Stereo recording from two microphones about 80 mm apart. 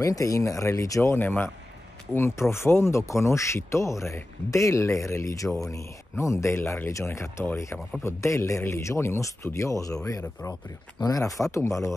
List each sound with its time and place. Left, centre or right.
0.0 s speech: left
1.1 s speech: left